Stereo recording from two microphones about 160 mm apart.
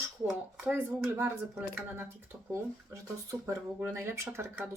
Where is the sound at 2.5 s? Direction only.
20° right (ahead or behind).